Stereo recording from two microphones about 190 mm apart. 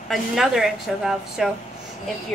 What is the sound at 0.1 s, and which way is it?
A woman's voice, centre (ahead or behind).